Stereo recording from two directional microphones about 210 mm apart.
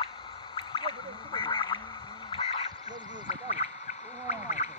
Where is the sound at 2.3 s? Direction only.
25° left (ahead or behind).